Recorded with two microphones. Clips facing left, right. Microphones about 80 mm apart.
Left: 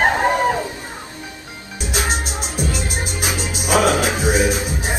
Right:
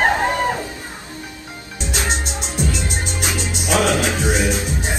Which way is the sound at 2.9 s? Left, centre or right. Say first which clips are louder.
Even; centre.